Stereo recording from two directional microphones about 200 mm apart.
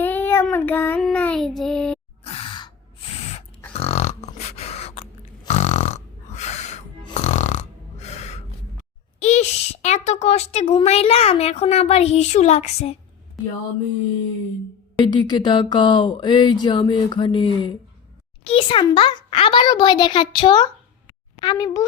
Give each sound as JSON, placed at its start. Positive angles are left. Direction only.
{"t": 0.0, "sound": "child singing", "side_deg": 10}
{"t": 2.2, "sound": "sigh", "side_deg": 30}
{"t": 3.7, "sound": "grunt", "side_deg": 30}
{"t": 5.5, "sound": "snoring", "side_deg": 35}
{"t": 9.2, "sound": "a child's voice", "side_deg": 35}
{"t": 15.0, "sound": "speech", "side_deg": 20}